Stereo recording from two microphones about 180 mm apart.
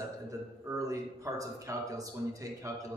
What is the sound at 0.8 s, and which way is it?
Speech, 20° right (ahead or behind).